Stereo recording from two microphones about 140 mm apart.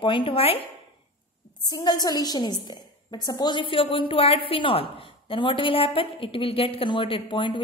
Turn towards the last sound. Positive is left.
turn(degrees=35)  # may be behind; listen again after turning